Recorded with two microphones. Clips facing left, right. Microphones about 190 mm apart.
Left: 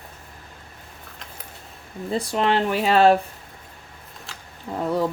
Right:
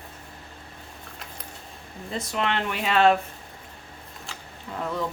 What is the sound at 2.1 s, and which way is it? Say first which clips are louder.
Speech: left 6 dB; 35° left (ahead or behind).